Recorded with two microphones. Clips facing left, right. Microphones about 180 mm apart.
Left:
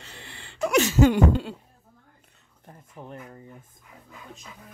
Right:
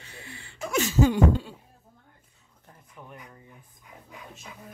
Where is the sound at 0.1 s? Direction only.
75° left (ahead or behind).